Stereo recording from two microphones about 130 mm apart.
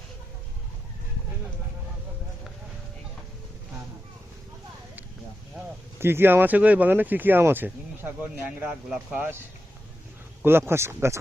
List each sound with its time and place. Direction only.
6.0 s speech: 15° right (ahead or behind)
10.4 s speech: 15° right (ahead or behind)